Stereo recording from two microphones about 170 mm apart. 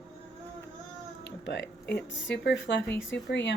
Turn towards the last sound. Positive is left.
turn(degrees=90)